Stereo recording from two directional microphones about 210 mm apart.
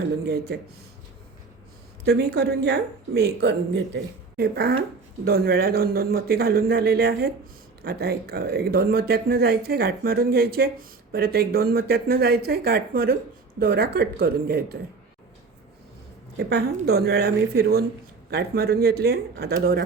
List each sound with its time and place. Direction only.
0.3 s speech: 50° right (ahead or behind)
2.0 s speech: 50° right (ahead or behind)
16.4 s speech: 50° right (ahead or behind)